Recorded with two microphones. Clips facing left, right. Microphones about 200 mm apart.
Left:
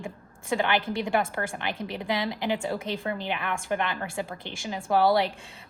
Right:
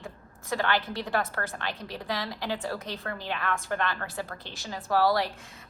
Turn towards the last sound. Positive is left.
turn(degrees=25)  # may be behind; listen again after turning